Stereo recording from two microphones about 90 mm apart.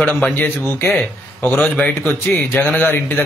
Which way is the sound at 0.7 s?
30° left (ahead or behind).